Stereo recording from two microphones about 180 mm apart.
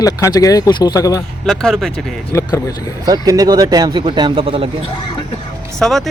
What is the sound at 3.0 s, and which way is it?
Speech, 20° right (ahead or behind).